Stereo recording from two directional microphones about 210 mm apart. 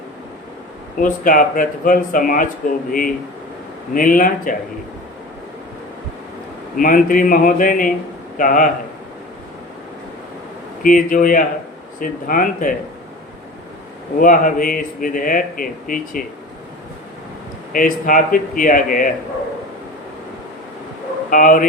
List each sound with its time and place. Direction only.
0.9 s speech: 40° left (ahead or behind)
6.7 s speech: 40° left (ahead or behind)
10.8 s speech: 40° left (ahead or behind)
14.2 s speech: 40° left (ahead or behind)
17.7 s speech: 40° left (ahead or behind)
21.2 s speech: 40° left (ahead or behind)